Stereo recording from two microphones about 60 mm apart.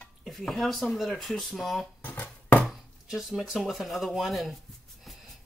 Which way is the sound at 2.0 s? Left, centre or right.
Left.